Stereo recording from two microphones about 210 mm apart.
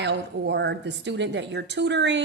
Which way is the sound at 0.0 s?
55° right (ahead or behind).